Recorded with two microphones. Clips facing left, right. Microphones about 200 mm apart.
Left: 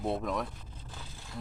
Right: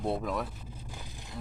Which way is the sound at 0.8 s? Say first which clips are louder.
Left 1 dB; 15° right (ahead or behind).